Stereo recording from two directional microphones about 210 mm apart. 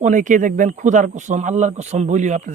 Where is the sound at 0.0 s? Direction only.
35° right (ahead or behind).